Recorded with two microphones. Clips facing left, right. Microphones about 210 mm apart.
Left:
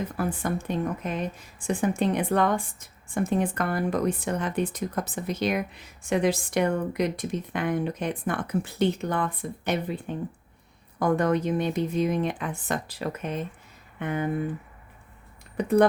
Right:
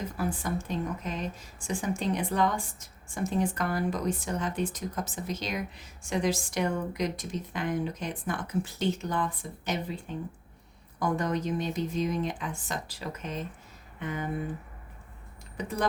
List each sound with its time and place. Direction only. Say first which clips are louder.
0.2 s speech: left 2 dB; 60° left (ahead or behind)
11.0 s speech: left 6 dB; 60° left (ahead or behind)
15.5 s speech: left 11 dB; 60° left (ahead or behind)